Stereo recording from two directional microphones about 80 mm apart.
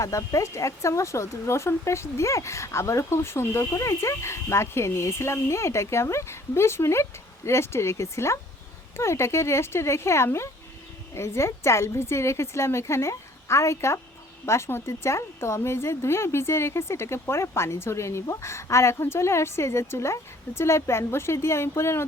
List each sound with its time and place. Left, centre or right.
0.0 s speech: left